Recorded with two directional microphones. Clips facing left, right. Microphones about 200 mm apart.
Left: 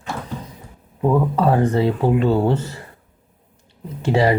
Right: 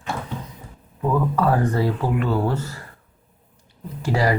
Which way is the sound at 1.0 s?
25° left (ahead or behind).